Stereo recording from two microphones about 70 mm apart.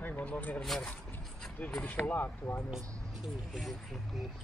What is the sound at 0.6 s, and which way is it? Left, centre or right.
Speech, centre.